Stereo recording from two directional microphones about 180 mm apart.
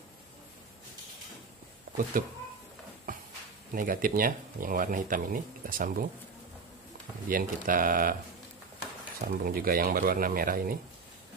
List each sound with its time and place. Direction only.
2.2 s speech: 50° right (ahead or behind)
3.7 s speech: 50° right (ahead or behind)
7.2 s speech: 50° right (ahead or behind)
9.3 s speech: 55° right (ahead or behind)